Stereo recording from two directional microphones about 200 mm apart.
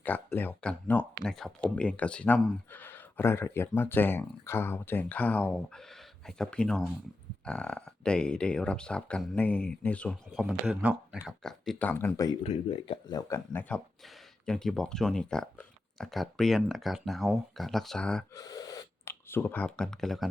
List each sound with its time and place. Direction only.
0.0 s speech: 10° left (ahead or behind)
12.4 s speech: 30° left (ahead or behind); by 18.3 s 5° left (ahead or behind)
18.3 s a sound: 20° left (ahead or behind); by 20.2 s centre (ahead or behind)